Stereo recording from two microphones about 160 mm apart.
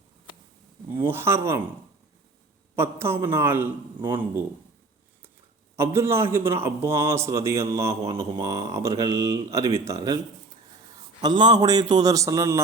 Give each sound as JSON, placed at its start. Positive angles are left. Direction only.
{"t": 0.9, "sound": "a man's voice", "side_deg": -15}
{"t": 2.7, "sound": "a man's voice", "side_deg": -15}
{"t": 5.7, "sound": "a man's voice", "side_deg": -15}
{"t": 11.2, "sound": "speech", "side_deg": -25}